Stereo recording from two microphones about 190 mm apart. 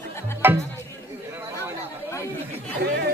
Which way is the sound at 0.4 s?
10° right (ahead or behind).